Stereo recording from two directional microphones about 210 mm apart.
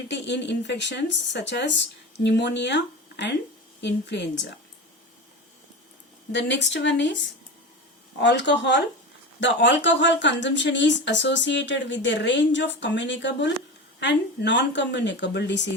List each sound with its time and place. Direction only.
0.1 s a woman's voice: 55° left (ahead or behind)
6.3 s a woman's voice: 55° left (ahead or behind)